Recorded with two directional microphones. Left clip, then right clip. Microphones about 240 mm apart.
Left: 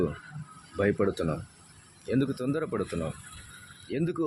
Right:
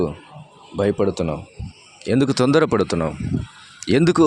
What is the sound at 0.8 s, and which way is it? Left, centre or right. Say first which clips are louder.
Speech: right 7 dB; right.